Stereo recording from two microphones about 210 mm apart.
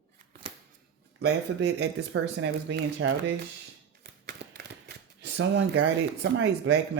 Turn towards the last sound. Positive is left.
turn(degrees=-55)  # may be behind; listen again after turning